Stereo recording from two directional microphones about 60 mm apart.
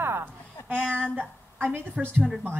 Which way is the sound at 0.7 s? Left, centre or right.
Centre.